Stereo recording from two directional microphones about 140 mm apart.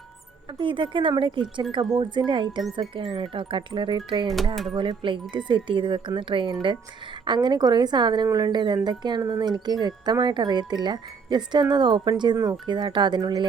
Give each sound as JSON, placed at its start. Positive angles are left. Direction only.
{"t": 0.6, "sound": "speech", "side_deg": -35}